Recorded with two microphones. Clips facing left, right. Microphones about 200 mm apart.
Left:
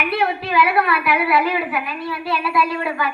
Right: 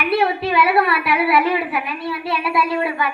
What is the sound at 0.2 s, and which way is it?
A woman's voice, 30° right (ahead or behind).